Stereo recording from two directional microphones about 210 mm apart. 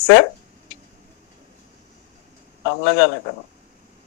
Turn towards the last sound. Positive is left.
turn(degrees=55)  # may be behind; listen again after turning